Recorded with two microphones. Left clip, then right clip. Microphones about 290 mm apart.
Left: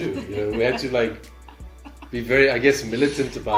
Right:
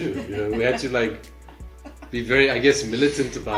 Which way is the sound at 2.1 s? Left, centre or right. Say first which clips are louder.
Left 1 dB; left.